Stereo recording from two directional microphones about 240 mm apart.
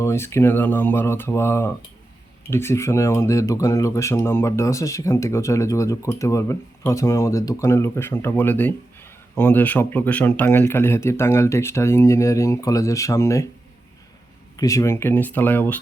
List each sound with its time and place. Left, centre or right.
0.0 s speech: centre
14.5 s speech: centre